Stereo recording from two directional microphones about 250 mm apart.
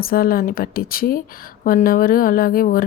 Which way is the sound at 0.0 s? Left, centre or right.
Left.